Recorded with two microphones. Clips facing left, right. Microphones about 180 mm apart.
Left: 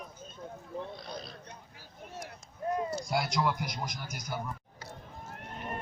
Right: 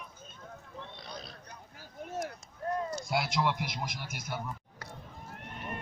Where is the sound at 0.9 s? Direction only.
Centre (ahead or behind).